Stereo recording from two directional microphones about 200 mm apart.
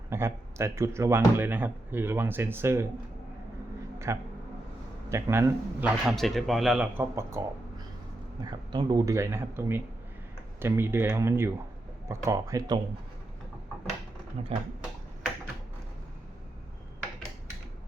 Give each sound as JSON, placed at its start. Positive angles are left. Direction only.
{"t": 0.1, "sound": "speech", "side_deg": -15}
{"t": 3.9, "sound": "a sound", "side_deg": -15}
{"t": 5.0, "sound": "speech", "side_deg": -15}
{"t": 6.1, "sound": "speech", "side_deg": 0}
{"t": 14.4, "sound": "speech", "side_deg": -30}